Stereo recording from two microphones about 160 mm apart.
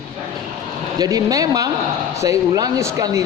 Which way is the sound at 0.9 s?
25° right (ahead or behind).